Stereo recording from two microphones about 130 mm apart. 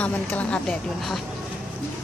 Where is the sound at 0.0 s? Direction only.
10° left (ahead or behind).